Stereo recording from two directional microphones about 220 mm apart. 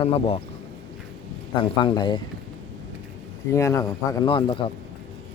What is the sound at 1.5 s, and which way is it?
Speech, 20° left (ahead or behind).